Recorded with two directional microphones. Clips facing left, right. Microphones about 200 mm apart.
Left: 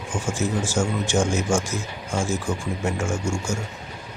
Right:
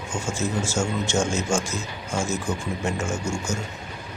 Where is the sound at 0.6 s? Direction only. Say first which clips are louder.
Left 1 dB; 15° left (ahead or behind).